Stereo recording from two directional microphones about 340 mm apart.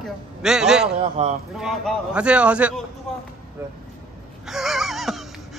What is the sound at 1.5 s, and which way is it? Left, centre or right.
Speech, centre.